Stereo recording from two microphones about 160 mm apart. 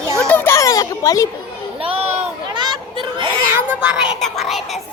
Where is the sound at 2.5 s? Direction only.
30° right (ahead or behind).